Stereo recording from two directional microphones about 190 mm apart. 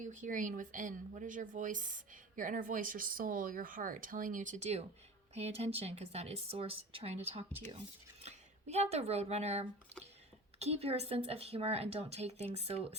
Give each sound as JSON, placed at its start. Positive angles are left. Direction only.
{"t": 0.0, "sound": "speech", "side_deg": -40}